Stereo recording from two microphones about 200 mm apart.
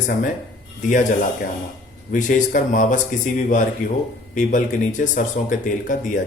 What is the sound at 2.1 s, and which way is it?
Speech, 40° left (ahead or behind).